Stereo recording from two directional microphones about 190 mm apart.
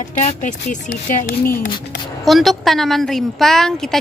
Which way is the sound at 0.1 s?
40° left (ahead or behind).